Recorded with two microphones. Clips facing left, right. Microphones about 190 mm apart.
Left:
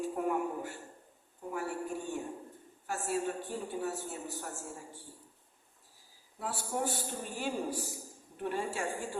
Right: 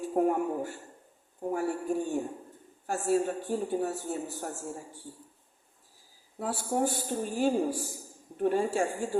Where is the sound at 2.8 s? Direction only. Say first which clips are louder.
Right 7 dB; 45° right (ahead or behind).